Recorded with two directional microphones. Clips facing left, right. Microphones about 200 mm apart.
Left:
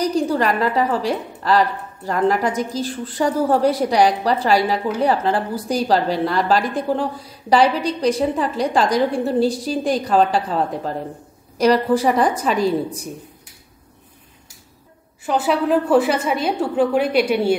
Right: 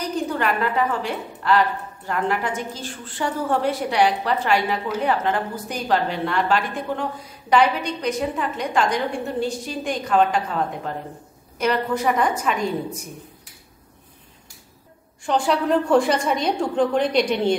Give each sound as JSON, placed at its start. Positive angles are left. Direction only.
{"t": 0.0, "sound": "a woman's voice", "side_deg": 35}
{"t": 15.2, "sound": "a woman's voice", "side_deg": 5}